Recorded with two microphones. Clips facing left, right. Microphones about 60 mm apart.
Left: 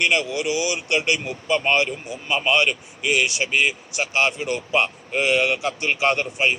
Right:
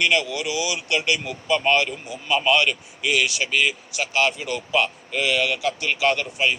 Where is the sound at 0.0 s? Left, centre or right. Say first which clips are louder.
Left 1 dB; left.